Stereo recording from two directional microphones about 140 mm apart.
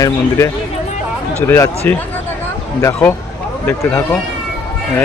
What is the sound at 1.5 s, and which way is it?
Speech, 20° left (ahead or behind).